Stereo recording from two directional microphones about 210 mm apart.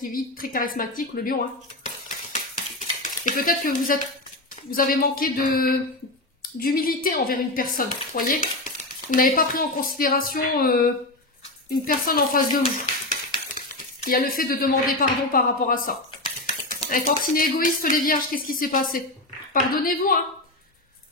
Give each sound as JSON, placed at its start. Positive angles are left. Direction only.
{"t": 0.0, "sound": "speech", "side_deg": 40}
{"t": 2.3, "sound": "a sound", "side_deg": 40}
{"t": 4.6, "sound": "a woman's voice", "side_deg": 45}